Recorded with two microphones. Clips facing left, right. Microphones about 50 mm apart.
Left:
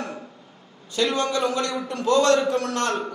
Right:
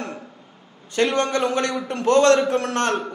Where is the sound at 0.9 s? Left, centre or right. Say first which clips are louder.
Right 3 dB; right.